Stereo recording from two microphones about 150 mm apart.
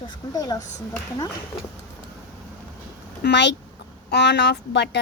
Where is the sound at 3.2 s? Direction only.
90° left.